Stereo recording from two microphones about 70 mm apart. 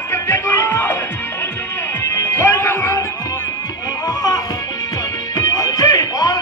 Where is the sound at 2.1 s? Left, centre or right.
Left.